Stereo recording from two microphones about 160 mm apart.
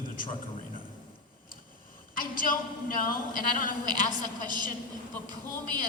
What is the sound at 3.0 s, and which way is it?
Speech, 60° left (ahead or behind).